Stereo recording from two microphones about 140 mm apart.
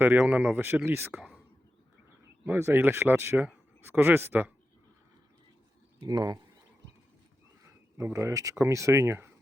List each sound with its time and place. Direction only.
0.0 s speech: 10° right (ahead or behind)
2.4 s speech: 15° right (ahead or behind)
6.0 s speech: 30° right (ahead or behind)
7.9 s speech: 20° right (ahead or behind)